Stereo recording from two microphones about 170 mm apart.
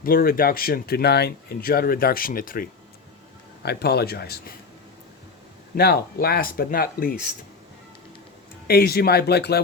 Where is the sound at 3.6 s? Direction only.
70° left (ahead or behind).